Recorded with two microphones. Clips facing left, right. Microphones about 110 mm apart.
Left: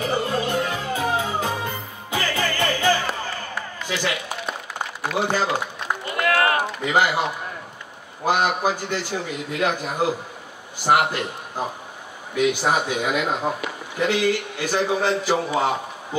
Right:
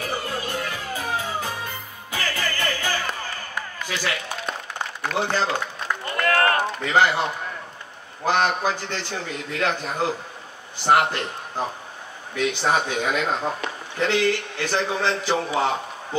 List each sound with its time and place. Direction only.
0.0 s music: 20° left (ahead or behind)
3.8 s a sound: 20° left (ahead or behind)
5.1 s run: 10° left (ahead or behind)
6.6 s a man's voice: 15° left (ahead or behind)
8.3 s a man's voice: 10° left (ahead or behind)